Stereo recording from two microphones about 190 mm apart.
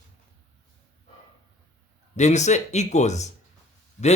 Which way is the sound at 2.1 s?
35° left (ahead or behind).